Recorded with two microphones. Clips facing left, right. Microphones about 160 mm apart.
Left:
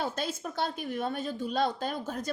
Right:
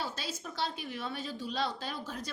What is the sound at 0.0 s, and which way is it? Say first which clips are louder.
A woman's voice: left 6 dB; 50° left (ahead or behind).